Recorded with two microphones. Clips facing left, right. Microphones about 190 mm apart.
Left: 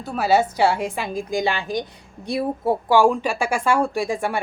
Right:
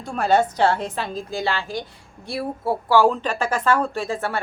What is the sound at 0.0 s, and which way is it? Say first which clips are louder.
A woman's voice: even; 5° left (ahead or behind).